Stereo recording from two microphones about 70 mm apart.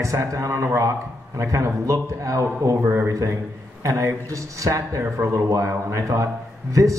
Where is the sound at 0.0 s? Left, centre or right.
Right.